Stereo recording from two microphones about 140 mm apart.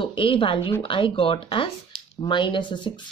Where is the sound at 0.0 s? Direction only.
35° left (ahead or behind).